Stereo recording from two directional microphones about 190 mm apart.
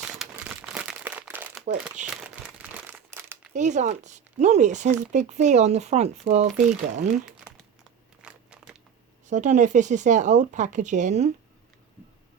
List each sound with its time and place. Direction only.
0.0 s crumpling: 5° right (ahead or behind)
3.5 s speech: 40° right (ahead or behind)
7.3 s crumpling: 5° left (ahead or behind)
8.2 s crunch: 5° right (ahead or behind)
9.3 s speech: 40° right (ahead or behind)